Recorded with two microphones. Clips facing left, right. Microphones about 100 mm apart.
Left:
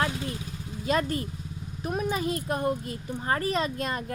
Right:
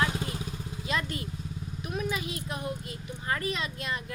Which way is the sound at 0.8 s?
40° left (ahead or behind).